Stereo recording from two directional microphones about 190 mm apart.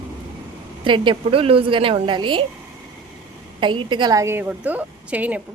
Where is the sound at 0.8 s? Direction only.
25° right (ahead or behind).